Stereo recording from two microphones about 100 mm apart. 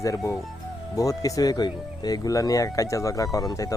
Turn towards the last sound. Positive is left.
turn(degrees=35)  # may be behind; listen again after turning